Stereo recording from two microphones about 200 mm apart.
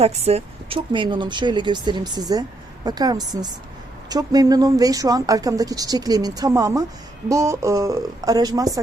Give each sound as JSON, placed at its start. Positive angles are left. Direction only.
{"t": 0.0, "sound": "speech", "side_deg": -30}